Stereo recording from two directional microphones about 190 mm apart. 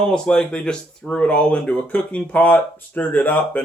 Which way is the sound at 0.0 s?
5° left (ahead or behind).